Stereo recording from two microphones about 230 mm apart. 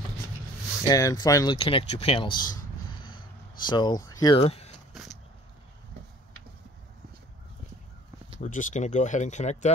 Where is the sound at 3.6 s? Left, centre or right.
Centre.